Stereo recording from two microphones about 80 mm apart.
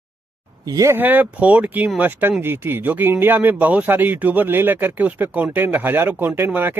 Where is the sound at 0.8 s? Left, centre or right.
Right.